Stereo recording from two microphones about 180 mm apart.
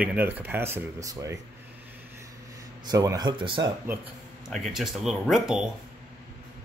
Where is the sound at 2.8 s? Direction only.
20° right (ahead or behind).